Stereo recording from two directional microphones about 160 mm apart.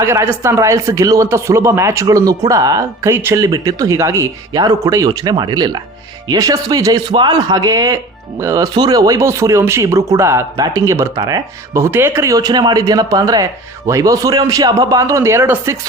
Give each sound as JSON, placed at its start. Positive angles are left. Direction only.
{"t": 0.0, "sound": "speech", "side_deg": -15}